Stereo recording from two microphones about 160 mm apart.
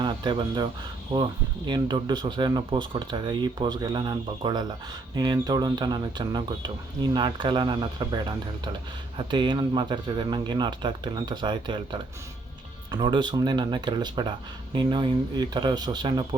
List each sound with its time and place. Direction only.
0.0 s speech: 30° right (ahead or behind)